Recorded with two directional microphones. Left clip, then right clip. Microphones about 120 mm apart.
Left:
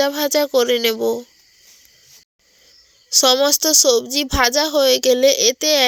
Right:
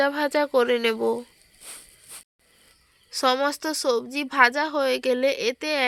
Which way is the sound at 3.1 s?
40° left (ahead or behind).